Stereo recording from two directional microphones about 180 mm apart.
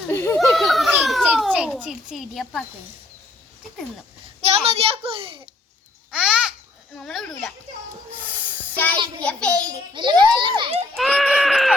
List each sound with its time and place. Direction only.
0.1 s a sound: 15° left (ahead or behind)
0.3 s a sound: centre (ahead or behind)
0.9 s children playing: 5° right (ahead or behind)
1.5 s a child's voice: 5° right (ahead or behind)
4.4 s a child's voice: 35° right (ahead or behind)
6.1 s babbling: 5° right (ahead or behind)
7.0 s speech: centre (ahead or behind)
8.4 s a sound: 10° left (ahead or behind)
9.2 s a child's voice: 5° left (ahead or behind)
9.9 s a child's voice: 25° right (ahead or behind)
10.9 s speech: centre (ahead or behind)